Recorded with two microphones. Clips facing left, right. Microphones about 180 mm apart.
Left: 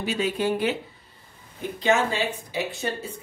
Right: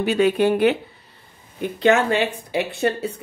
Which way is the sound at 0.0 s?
60° right (ahead or behind).